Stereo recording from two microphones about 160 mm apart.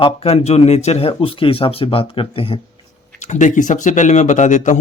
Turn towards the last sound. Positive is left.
turn(degrees=50)  # may be behind; listen again after turning